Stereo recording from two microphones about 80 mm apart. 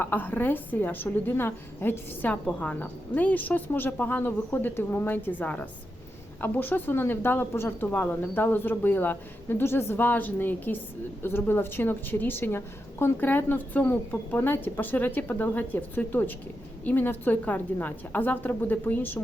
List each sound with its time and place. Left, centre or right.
0.0 s a woman's voice: left